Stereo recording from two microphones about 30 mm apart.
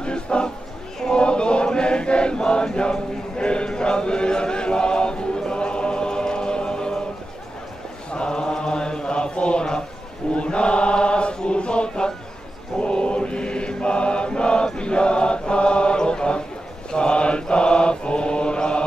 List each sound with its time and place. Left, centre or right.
0.0 s a sound: left
1.1 s chant: left
8.1 s mantra: left
10.3 s chant: left
11.4 s mantra: left
16.0 s a sound: left
16.9 s mantra: left